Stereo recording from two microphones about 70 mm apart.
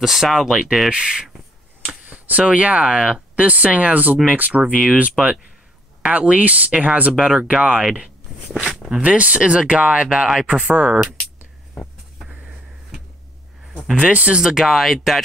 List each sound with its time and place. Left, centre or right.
0.0 s speech: centre
9.0 s speech: centre
13.9 s speech: centre